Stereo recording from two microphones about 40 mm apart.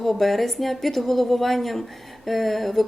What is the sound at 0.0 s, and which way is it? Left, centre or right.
Speech, centre.